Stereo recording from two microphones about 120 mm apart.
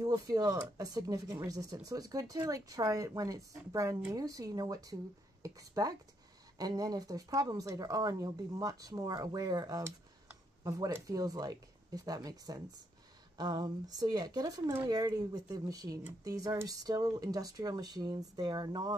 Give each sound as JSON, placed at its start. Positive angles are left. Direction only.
{"t": 0.0, "sound": "speech", "side_deg": -30}